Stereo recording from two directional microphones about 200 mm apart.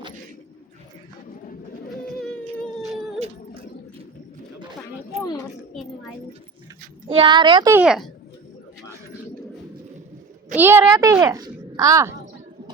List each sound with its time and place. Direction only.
2.2 s a sound: 5° left (ahead or behind)
7.1 s speech: 25° right (ahead or behind)
7.8 s speech: centre (ahead or behind)
10.5 s a woman's voice: 10° right (ahead or behind)